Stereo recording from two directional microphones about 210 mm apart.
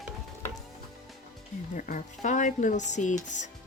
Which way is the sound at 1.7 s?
40° left (ahead or behind).